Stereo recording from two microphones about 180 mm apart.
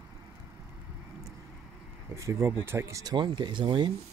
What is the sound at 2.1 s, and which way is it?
Speech, 15° right (ahead or behind).